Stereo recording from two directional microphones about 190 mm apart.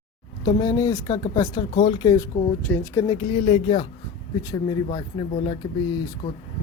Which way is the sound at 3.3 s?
35° left (ahead or behind).